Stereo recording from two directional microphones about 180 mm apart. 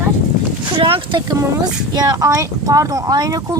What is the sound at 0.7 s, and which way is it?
Speech, 30° right (ahead or behind).